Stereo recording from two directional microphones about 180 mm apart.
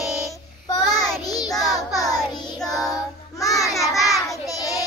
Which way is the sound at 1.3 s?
20° left (ahead or behind).